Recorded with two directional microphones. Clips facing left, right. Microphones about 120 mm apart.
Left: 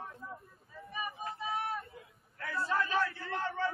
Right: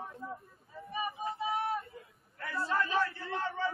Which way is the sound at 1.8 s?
Centre (ahead or behind).